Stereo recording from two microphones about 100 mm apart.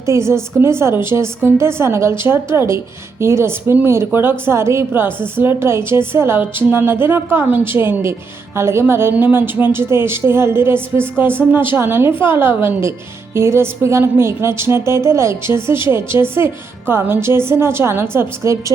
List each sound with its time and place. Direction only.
0.0 s a woman's voice: 30° right (ahead or behind)